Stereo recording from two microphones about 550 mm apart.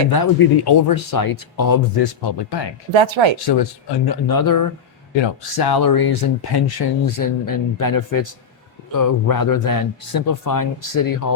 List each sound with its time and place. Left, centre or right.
0.1 s speech: left
2.9 s speech: right
3.3 s speech: left
5.1 s speech: left